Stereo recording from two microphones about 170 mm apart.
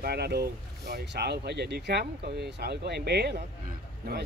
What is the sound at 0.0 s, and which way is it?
Speech, 70° right (ahead or behind).